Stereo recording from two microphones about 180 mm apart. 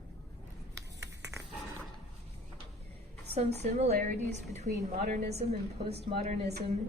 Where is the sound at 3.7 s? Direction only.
40° right (ahead or behind).